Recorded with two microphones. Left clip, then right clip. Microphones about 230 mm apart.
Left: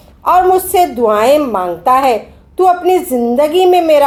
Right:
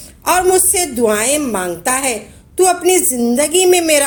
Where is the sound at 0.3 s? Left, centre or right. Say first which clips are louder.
Left 4 dB; right.